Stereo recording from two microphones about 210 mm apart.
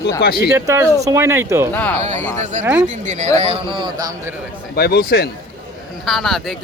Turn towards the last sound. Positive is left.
turn(degrees=0)  # may be behind; listen again after turning